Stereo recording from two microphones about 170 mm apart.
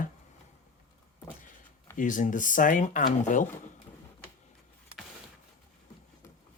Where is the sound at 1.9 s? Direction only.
50° left (ahead or behind).